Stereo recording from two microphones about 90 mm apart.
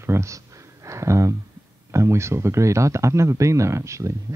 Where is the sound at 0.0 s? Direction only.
30° right (ahead or behind).